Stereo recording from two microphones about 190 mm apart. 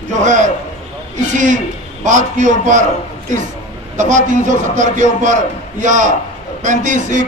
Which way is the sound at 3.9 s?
40° right (ahead or behind).